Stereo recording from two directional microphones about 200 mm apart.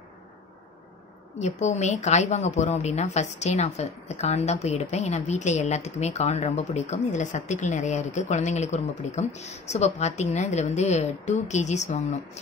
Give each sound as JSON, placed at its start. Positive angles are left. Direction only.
{"t": 1.4, "sound": "speech", "side_deg": 35}